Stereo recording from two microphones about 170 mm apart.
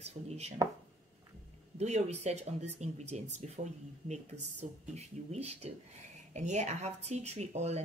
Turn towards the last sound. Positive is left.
turn(degrees=-40)  # may be behind; listen again after turning